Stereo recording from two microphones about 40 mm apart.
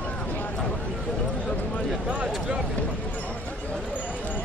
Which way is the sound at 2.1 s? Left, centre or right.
Right.